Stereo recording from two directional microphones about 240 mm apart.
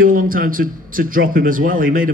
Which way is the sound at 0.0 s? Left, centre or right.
Right.